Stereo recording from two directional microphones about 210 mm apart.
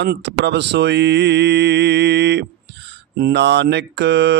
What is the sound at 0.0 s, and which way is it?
Speech, 55° right (ahead or behind).